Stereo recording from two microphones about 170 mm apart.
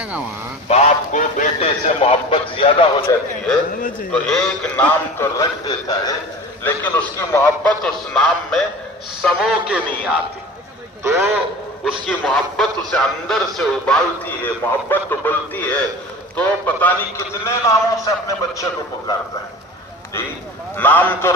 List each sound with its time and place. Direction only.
0.7 s a sound: 45° left (ahead or behind)
4.1 s speech: 5° left (ahead or behind); by 6.1 s 25° left (ahead or behind)
6.6 s speech: 10° left (ahead or behind)
7.9 s a man's voice: centre (ahead or behind)
11.0 s a man's voice: 15° right (ahead or behind)
12.0 s speech: centre (ahead or behind); by 18.6 s 20° left (ahead or behind)
20.7 s speech: 10° left (ahead or behind)